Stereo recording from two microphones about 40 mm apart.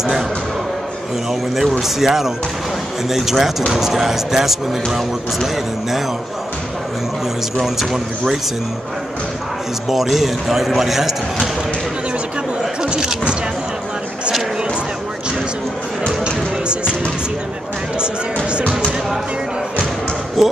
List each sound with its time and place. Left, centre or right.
1.6 s a man's voice: centre
7.6 s speech: centre
9.8 s a man's voice: centre
12.8 s a sound: centre
16.3 s music: right
17.9 s music: right
20.4 s basketball bounce: centre